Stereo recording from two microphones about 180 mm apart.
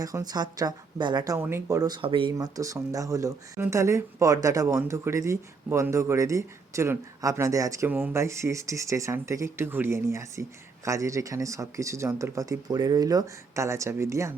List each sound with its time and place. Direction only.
0.0 s speech: 20° right (ahead or behind)